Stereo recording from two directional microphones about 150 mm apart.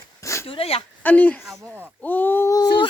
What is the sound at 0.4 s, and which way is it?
Speech, 40° left (ahead or behind).